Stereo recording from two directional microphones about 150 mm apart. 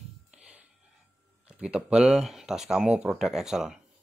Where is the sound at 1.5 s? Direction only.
5° right (ahead or behind).